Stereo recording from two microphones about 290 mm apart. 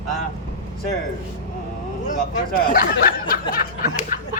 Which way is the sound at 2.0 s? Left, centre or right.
Left.